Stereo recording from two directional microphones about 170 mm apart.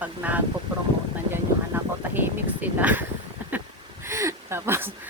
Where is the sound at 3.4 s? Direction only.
10° right (ahead or behind).